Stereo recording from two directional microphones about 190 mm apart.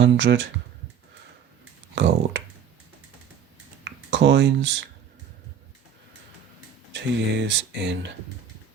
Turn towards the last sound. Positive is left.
turn(degrees=-65)  # may be behind; listen again after turning